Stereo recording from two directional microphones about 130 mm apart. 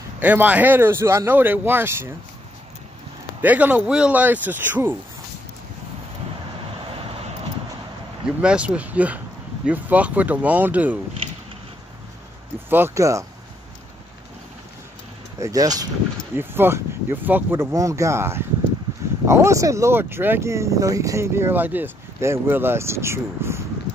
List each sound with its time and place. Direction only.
0.2 s speech: 10° right (ahead or behind)
3.3 s speech: 10° right (ahead or behind)
8.4 s speech: 10° right (ahead or behind)
12.6 s speech: 15° right (ahead or behind)
15.4 s speech: 30° right (ahead or behind)
16.3 s speech: 15° right (ahead or behind)